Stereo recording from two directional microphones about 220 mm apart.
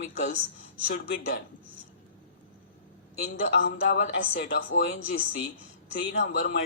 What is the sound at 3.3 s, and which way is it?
Speech, 40° left (ahead or behind).